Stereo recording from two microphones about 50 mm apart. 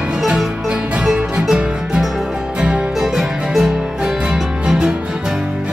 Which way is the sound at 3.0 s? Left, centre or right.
Centre.